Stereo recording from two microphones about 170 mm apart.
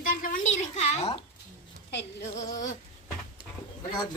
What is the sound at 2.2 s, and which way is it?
Speech, 45° left (ahead or behind).